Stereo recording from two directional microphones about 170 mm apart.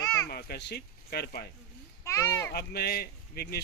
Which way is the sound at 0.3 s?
70° left (ahead or behind).